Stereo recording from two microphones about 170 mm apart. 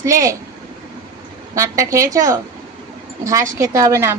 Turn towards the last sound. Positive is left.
turn(degrees=-15)  # may be behind; listen again after turning